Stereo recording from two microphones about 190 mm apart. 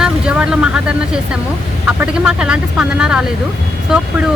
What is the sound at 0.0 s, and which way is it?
Speech, 5° right (ahead or behind).